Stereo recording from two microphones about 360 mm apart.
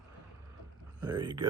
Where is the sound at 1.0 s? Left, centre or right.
Centre.